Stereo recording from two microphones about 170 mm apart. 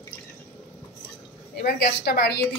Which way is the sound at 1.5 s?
65° left (ahead or behind).